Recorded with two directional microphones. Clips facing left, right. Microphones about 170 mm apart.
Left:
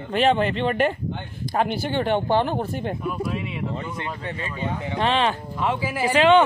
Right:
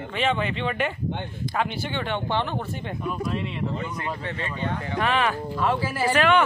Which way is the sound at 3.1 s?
5° left (ahead or behind).